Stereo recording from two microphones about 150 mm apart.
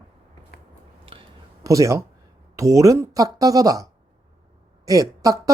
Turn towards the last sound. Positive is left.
turn(degrees=-25)  # may be behind; listen again after turning